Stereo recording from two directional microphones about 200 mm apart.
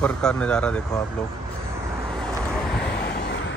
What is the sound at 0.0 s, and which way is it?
A man's voice, 5° left (ahead or behind).